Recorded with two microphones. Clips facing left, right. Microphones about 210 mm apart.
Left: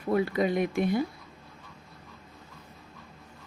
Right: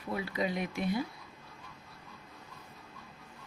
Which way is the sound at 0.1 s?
55° left (ahead or behind).